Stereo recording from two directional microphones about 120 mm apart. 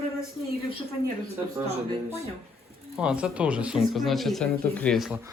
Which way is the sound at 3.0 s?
10° right (ahead or behind).